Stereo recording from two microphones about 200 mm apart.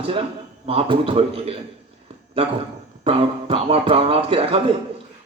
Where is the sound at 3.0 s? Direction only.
30° right (ahead or behind).